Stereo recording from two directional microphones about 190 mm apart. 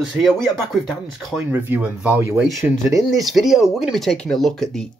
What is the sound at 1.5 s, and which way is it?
Speech, 10° right (ahead or behind).